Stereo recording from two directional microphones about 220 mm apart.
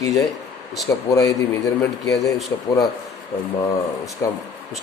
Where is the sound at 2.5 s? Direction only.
15° left (ahead or behind).